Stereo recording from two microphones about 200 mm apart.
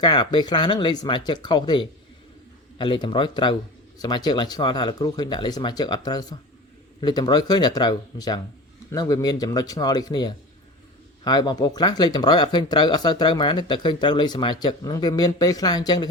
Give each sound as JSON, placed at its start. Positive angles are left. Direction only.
{"t": 0.0, "sound": "speech", "side_deg": 20}